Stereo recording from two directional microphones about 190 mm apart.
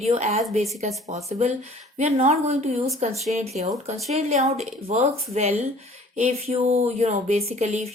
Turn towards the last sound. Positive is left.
turn(degrees=-35)  # may be behind; listen again after turning